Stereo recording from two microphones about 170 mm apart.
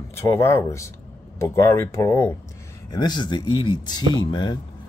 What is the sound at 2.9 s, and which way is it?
Speech, 25° left (ahead or behind).